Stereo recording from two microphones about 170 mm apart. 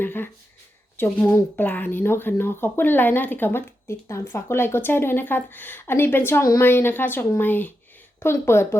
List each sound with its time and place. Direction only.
0.0 s speech: 10° left (ahead or behind)